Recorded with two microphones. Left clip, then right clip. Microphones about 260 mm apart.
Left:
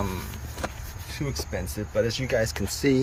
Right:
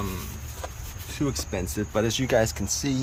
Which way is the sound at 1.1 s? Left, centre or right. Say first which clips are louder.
Right 3 dB; right.